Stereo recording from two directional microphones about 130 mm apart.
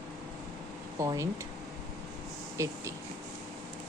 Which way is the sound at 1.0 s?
25° right (ahead or behind).